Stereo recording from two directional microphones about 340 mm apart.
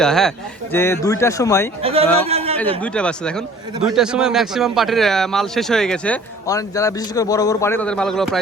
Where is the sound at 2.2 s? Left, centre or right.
Centre.